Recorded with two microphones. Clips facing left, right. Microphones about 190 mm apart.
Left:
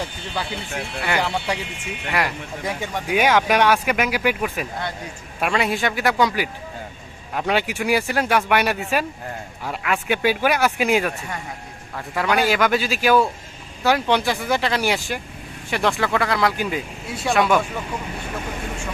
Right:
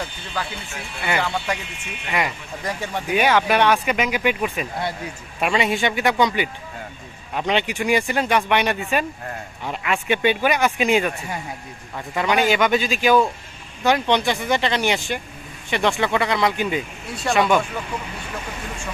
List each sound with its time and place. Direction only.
1.2 s speech: 10° left (ahead or behind)
2.1 s speech: centre (ahead or behind)